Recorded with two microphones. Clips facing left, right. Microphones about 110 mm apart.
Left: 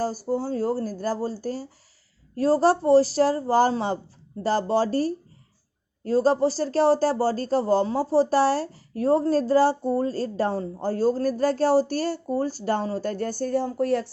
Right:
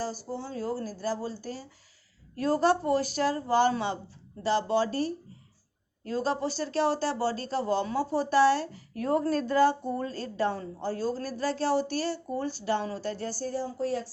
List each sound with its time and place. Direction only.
0.0 s speech: 45° left (ahead or behind); by 14.1 s 65° left (ahead or behind)